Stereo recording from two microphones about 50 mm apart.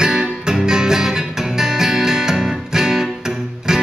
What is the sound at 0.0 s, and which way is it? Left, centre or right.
Music, centre.